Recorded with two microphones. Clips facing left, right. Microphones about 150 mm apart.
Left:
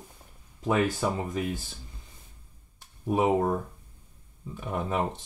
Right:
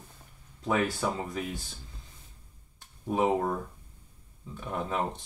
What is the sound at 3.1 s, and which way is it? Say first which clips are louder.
Speech: left 2 dB; 10° left (ahead or behind).